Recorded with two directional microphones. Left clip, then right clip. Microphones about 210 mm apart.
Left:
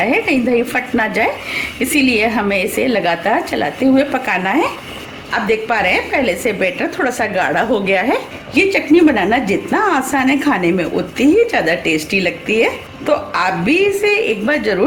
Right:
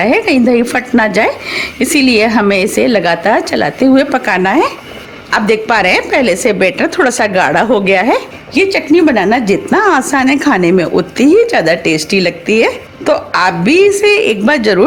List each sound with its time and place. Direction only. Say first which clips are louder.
0.0 s a woman's voice: right 5 dB; 50° right (ahead or behind)